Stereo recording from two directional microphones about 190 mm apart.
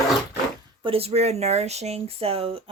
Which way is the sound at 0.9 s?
30° right (ahead or behind).